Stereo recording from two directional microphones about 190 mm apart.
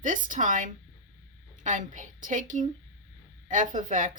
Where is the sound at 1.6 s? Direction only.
40° right (ahead or behind).